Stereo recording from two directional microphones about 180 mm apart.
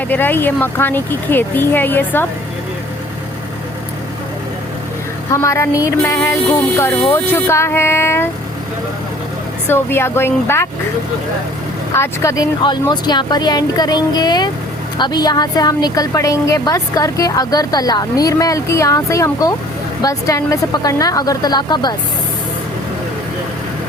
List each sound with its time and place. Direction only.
0.1 s speech: 10° left (ahead or behind)
5.3 s speech: 15° left (ahead or behind)
9.6 s speech: 15° left (ahead or behind)
11.9 s a woman's voice: 15° left (ahead or behind)